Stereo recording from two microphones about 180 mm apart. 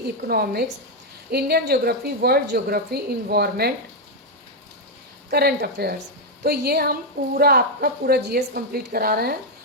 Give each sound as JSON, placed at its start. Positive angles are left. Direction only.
{"t": 0.3, "sound": "a woman's voice", "side_deg": -60}
{"t": 5.3, "sound": "a woman's voice", "side_deg": -60}